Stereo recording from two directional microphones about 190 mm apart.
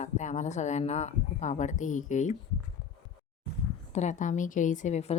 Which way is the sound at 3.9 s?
40° left (ahead or behind).